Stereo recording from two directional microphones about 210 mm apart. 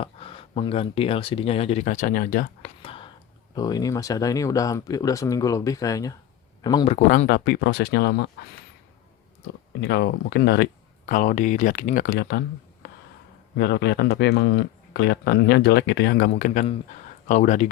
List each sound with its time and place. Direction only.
0.0 s speech: 25° left (ahead or behind); by 2.6 s 40° left (ahead or behind)
2.8 s whispering: 25° left (ahead or behind)
3.5 s speech: 20° left (ahead or behind)
6.9 s speech: 35° left (ahead or behind)
9.8 s speech: 50° left (ahead or behind)
11.0 s speech: 35° left (ahead or behind); by 12.5 s 55° left (ahead or behind)
13.6 s speech: 55° left (ahead or behind); by 17.7 s 35° left (ahead or behind)